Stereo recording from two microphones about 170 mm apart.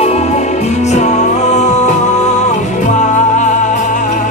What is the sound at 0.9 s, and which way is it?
Music, 45° left (ahead or behind).